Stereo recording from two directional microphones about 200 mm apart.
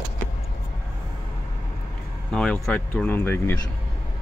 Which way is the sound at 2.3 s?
5° left (ahead or behind).